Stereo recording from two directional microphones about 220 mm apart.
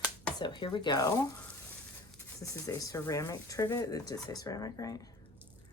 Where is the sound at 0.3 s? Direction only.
20° left (ahead or behind).